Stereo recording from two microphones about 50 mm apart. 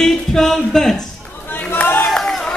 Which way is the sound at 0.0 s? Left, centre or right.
Centre.